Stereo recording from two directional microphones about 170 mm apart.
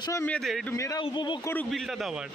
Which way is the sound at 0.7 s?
20° left (ahead or behind).